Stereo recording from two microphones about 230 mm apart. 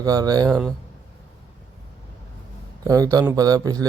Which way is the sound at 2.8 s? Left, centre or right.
Centre.